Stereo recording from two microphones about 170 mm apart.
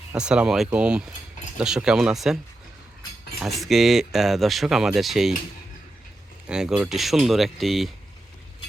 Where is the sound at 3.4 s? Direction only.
Centre (ahead or behind).